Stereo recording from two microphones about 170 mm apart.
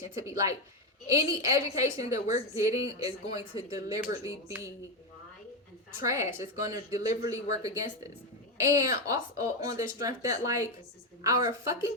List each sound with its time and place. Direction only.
0.2 s a woman's voice: 20° right (ahead or behind)
6.1 s a woman's voice: 15° right (ahead or behind)